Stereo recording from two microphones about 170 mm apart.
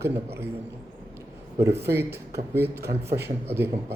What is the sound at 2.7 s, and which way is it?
Speech, 70° right (ahead or behind).